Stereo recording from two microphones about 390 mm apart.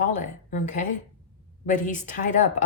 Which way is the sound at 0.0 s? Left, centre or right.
Centre.